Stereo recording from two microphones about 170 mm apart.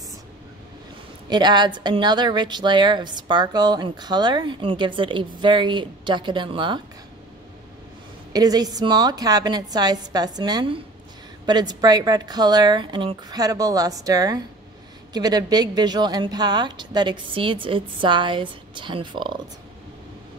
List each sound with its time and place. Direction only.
1.3 s a woman's voice: 25° right (ahead or behind)
8.3 s a woman's voice: 20° right (ahead or behind)